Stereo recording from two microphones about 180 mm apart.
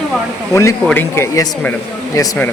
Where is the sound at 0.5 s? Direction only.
15° left (ahead or behind).